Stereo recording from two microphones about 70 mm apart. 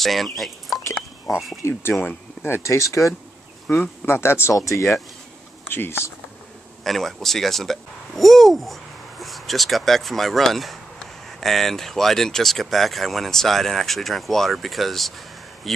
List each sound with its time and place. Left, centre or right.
0.0 s speech: centre
1.3 s speech: left
1.6 s speech: left
3.6 s speech: left
4.1 s speech: left
5.7 s speech: left
6.8 s speech: centre